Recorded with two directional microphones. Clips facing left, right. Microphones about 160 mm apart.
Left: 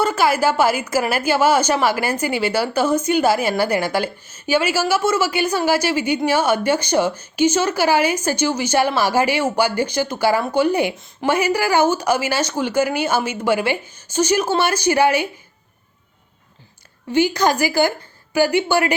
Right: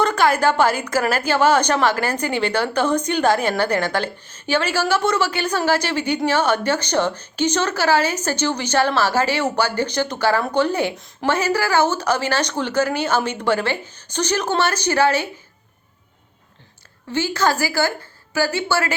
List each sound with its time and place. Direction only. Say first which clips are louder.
0.0 s a woman's voice: even; 5° left (ahead or behind)
10.9 s a woman's voice: left 1 dB; centre (ahead or behind)
11.3 s a woman's voice: left 2 dB; 10° left (ahead or behind)
17.1 s a woman's voice: left 3 dB; 15° left (ahead or behind)